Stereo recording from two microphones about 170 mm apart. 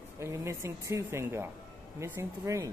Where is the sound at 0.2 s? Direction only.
15° right (ahead or behind).